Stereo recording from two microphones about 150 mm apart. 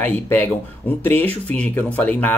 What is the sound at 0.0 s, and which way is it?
Speech, 10° left (ahead or behind).